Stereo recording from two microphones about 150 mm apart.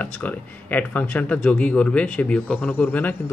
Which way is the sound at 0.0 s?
10° left (ahead or behind).